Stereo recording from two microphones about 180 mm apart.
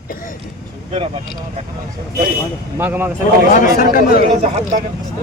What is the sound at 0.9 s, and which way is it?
Speech, 35° right (ahead or behind).